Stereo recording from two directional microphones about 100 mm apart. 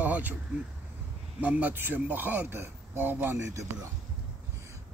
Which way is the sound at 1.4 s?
15° right (ahead or behind).